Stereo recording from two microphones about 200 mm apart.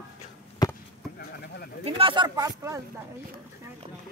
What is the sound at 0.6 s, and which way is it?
Chop, 20° left (ahead or behind).